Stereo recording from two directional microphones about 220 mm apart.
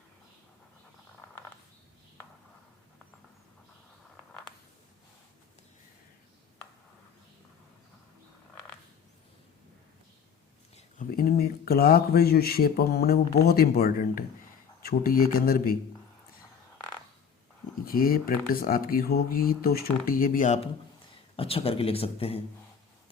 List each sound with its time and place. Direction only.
4.2 s a sound: 5° left (ahead or behind)
10.8 s speech: 35° left (ahead or behind)
17.8 s speech: 40° left (ahead or behind); by 22.4 s 25° left (ahead or behind)